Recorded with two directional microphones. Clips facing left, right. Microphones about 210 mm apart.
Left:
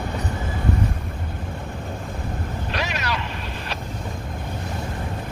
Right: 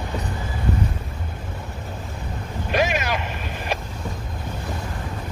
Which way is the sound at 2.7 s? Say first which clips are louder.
Right 7 dB; 50° right (ahead or behind).